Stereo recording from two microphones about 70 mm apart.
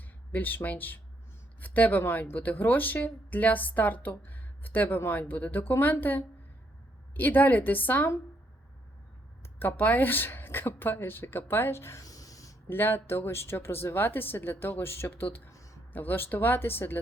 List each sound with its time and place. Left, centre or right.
0.3 s speech: left
9.4 s speech: left
12.0 s a sound: left
12.6 s speech: left
15.4 s a sound: left
15.9 s speech: left